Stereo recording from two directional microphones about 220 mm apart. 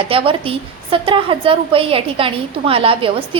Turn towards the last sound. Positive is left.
turn(degrees=-25)  # may be behind; listen again after turning